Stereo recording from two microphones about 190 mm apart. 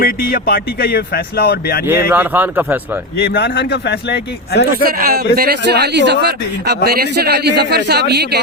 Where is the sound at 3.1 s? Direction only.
60° left (ahead or behind).